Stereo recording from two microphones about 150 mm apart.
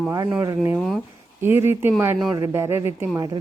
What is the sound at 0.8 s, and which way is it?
Speech, centre (ahead or behind).